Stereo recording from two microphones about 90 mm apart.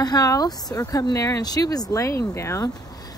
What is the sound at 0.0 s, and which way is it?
Speech, 45° left (ahead or behind).